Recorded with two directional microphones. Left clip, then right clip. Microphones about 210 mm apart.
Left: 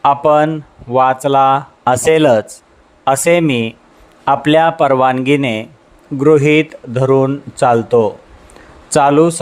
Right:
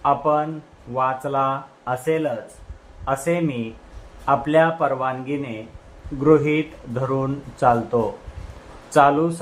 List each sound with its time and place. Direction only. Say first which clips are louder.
0.0 s speech: left 9 dB; 45° left (ahead or behind)